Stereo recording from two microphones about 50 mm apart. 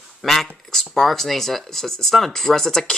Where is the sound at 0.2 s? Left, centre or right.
Centre.